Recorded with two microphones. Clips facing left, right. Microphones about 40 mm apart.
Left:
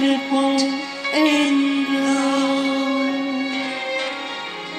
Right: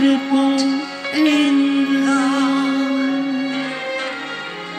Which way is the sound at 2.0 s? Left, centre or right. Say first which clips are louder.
Right 2 dB; centre.